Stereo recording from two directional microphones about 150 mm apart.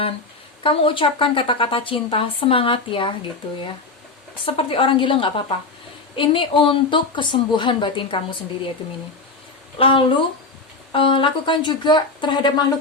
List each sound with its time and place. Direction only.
0.6 s a woman's voice: 35° left (ahead or behind)
4.4 s a woman's voice: 40° left (ahead or behind)
9.7 s a woman's voice: 35° left (ahead or behind)